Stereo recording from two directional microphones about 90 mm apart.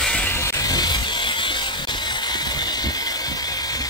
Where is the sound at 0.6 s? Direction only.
50° left (ahead or behind).